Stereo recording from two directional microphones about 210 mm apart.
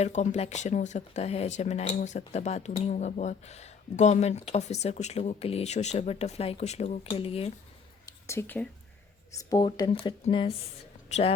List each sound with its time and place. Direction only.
0.0 s speech: 35° left (ahead or behind)
8.0 s a sound: 15° left (ahead or behind)
9.4 s speech: 20° left (ahead or behind)